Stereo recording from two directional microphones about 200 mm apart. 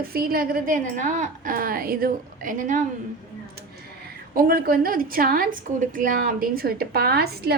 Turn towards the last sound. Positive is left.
turn(degrees=-50)  # may be behind; listen again after turning